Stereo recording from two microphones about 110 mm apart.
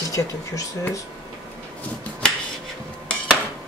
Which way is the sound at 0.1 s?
30° left (ahead or behind).